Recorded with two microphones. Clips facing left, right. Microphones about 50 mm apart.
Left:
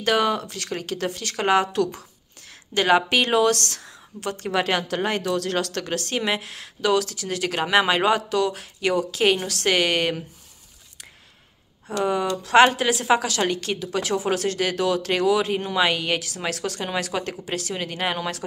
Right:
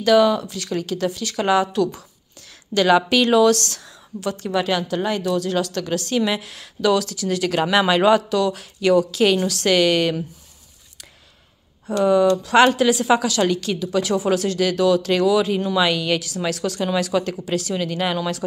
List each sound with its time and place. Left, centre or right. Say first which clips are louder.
0.0 s speech: right 6 dB; left
2.7 s a woman's voice: right 3 dB; left
4.5 s a woman's voice: right 1 dB; left
12.0 s a woman's voice: right 7 dB; left